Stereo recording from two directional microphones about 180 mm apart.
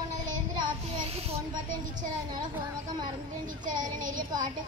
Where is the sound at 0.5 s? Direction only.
35° right (ahead or behind).